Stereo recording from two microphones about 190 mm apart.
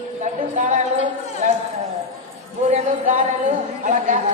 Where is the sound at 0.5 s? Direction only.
40° right (ahead or behind).